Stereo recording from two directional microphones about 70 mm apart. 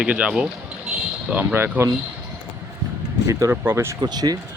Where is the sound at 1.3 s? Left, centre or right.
Right.